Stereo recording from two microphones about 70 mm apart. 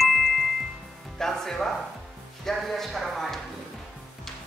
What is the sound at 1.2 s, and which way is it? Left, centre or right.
Music, centre.